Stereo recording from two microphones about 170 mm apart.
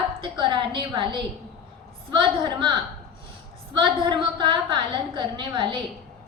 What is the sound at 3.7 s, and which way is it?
A woman's voice, 25° right (ahead or behind).